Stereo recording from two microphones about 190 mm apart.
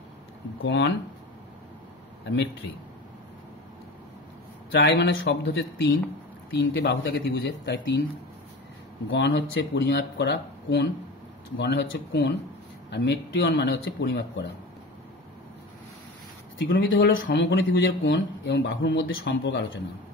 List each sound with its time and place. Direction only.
0.7 s speech: 65° left (ahead or behind)
4.7 s speech: 65° left (ahead or behind)
6.5 s speech: 65° left (ahead or behind)
9.1 s speech: 75° left (ahead or behind)
16.7 s speech: 70° left (ahead or behind)